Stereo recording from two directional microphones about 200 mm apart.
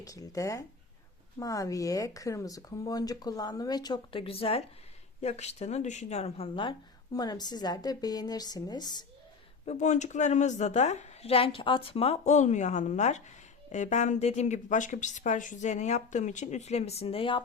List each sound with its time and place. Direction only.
0.0 s speech: 15° left (ahead or behind)
9.6 s a woman's voice: 35° left (ahead or behind)